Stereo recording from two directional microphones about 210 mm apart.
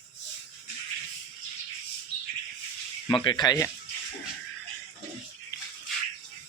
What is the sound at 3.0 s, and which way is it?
Speech, 20° left (ahead or behind).